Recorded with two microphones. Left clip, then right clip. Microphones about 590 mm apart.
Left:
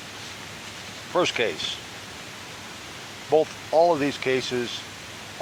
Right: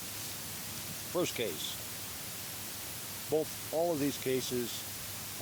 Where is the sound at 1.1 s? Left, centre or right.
Right.